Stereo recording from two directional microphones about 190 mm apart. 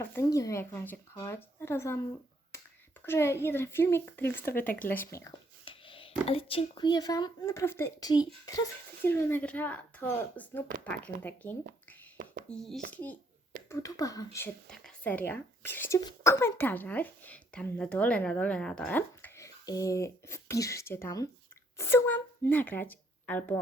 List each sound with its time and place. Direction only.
0.0 s speech: 15° left (ahead or behind)
3.1 s speech: 15° left (ahead or behind)
4.6 s speech: 45° left (ahead or behind)
4.9 s speech: 15° left (ahead or behind)
5.6 s speech: 25° left (ahead or behind)
9.0 s speech: 10° left (ahead or behind)
12.1 s a sound: 50° right (ahead or behind)
12.5 s a child's voice: centre (ahead or behind)